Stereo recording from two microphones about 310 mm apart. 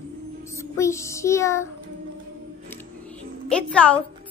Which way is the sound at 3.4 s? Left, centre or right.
Centre.